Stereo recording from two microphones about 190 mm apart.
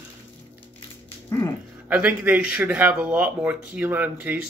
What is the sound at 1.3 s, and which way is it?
Speech, 15° left (ahead or behind).